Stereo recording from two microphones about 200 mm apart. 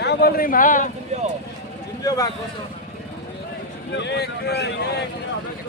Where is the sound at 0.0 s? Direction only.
55° left (ahead or behind).